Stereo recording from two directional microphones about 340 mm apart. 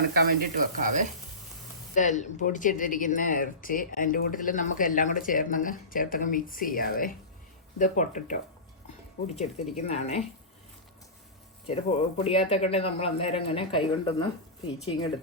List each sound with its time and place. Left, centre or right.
0.1 s speech: right
2.0 s speech: left
11.6 s speech: centre